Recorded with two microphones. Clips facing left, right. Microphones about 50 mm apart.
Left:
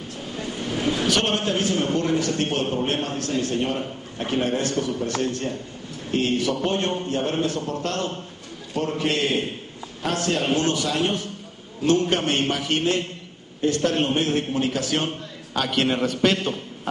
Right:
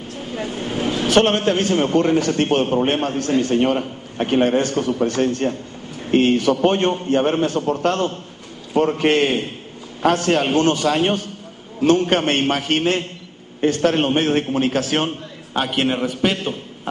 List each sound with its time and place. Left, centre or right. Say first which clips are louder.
0.4 s vehicle: right 3 dB; right
1.0 s a man's voice: right 10 dB; right
15.5 s a man's voice: right 2 dB; right